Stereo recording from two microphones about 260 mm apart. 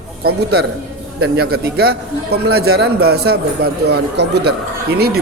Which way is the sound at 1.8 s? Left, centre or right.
Right.